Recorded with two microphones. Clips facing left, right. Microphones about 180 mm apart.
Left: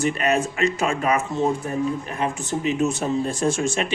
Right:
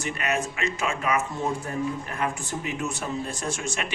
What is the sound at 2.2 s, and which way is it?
Speech, 20° left (ahead or behind).